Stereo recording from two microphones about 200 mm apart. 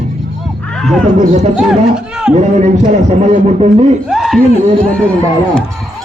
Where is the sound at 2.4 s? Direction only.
35° right (ahead or behind).